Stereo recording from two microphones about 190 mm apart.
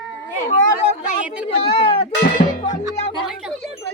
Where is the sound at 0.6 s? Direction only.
40° left (ahead or behind).